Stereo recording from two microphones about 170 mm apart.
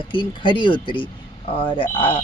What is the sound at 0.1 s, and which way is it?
Speech, 30° left (ahead or behind).